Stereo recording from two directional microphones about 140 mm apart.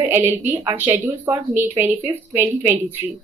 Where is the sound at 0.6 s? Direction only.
25° right (ahead or behind).